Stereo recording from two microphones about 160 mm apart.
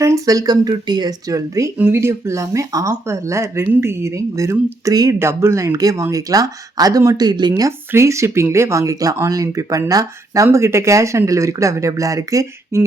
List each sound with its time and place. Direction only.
0.0 s speech: 20° right (ahead or behind)